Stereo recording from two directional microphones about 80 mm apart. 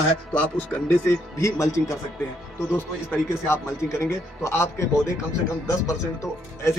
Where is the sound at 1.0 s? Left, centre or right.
Left.